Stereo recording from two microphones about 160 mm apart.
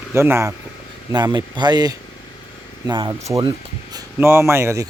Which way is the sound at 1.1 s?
25° right (ahead or behind).